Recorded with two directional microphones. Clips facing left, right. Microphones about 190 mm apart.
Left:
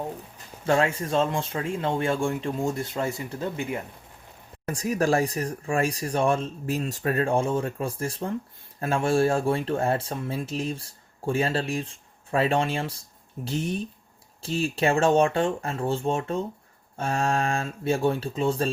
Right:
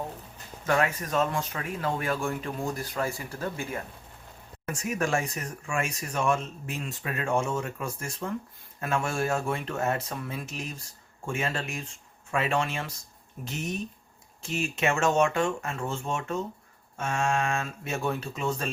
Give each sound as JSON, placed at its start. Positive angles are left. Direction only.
{"t": 0.6, "sound": "speech", "side_deg": 30}
{"t": 4.6, "sound": "speech", "side_deg": 35}